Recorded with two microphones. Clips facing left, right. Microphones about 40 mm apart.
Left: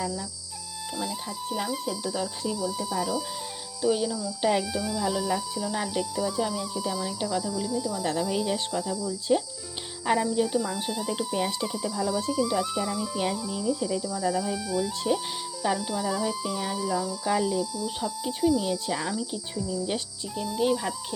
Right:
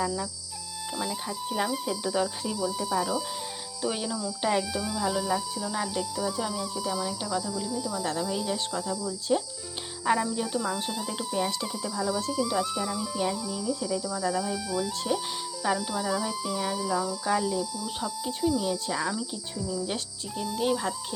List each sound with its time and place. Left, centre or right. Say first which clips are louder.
0.9 s speech: right 1 dB; centre
3.8 s speech: left 5 dB; centre
4.4 s speech: left 2 dB; centre
8.2 s speech: left 2 dB; centre
8.9 s speech: left 2 dB; centre
13.3 s speech: left 2 dB; centre
14.2 s speech: left 1 dB; centre
17.2 s speech: left 3 dB; centre
19.1 s speech: left 2 dB; centre